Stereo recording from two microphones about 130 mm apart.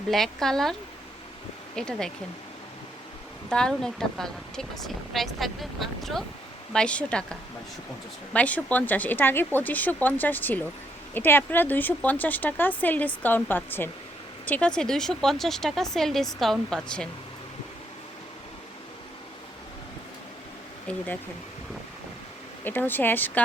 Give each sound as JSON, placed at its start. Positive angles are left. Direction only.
{"t": 0.1, "sound": "a woman's voice", "side_deg": 5}
{"t": 3.5, "sound": "a woman's voice", "side_deg": 5}
{"t": 20.9, "sound": "speech", "side_deg": 10}
{"t": 22.6, "sound": "speech", "side_deg": 15}